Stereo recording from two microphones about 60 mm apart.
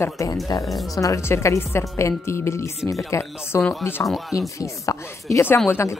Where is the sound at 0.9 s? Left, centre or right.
Left.